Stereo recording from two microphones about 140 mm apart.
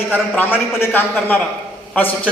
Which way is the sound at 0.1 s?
15° left (ahead or behind).